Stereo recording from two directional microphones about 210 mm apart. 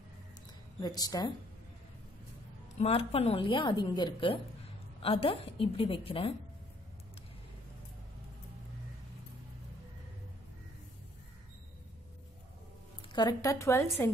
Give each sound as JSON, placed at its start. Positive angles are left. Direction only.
{"t": 0.7, "sound": "a woman's voice", "side_deg": 20}
{"t": 2.8, "sound": "a woman's voice", "side_deg": 30}
{"t": 13.1, "sound": "a woman's voice", "side_deg": 20}